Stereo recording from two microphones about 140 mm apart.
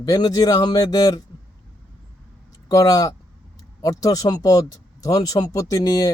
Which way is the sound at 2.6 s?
25° left (ahead or behind).